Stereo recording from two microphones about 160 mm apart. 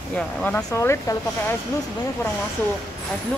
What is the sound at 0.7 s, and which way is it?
Speech, 20° left (ahead or behind).